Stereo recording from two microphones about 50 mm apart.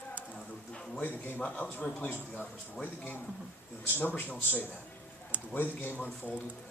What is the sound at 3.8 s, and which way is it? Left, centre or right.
A man's voice, left.